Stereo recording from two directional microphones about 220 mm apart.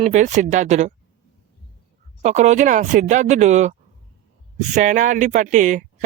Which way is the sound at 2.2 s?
30° right (ahead or behind).